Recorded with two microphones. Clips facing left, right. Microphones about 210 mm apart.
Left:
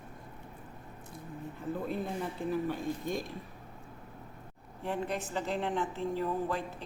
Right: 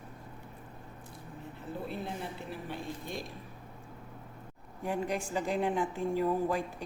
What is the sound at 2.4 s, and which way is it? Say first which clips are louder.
Speech: left 7 dB; 45° left (ahead or behind).